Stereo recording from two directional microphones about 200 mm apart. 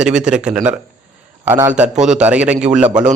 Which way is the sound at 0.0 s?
5° right (ahead or behind).